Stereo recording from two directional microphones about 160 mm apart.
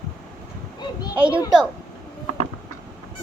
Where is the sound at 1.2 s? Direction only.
10° right (ahead or behind).